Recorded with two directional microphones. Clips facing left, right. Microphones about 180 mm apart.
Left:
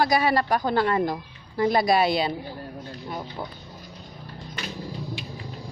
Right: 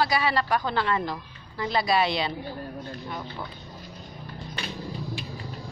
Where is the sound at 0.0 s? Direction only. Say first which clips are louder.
Left 3 dB; 45° left (ahead or behind).